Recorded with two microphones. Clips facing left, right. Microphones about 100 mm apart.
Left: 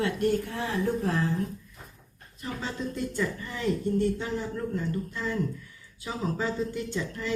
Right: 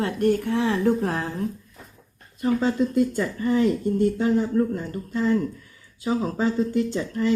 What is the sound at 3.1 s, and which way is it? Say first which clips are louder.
Speech: right 9 dB; 45° right (ahead or behind).